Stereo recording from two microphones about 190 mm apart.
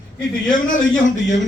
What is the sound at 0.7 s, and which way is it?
Speech, 40° left (ahead or behind).